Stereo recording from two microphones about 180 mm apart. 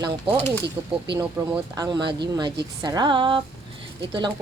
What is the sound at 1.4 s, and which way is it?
Speech, 15° right (ahead or behind).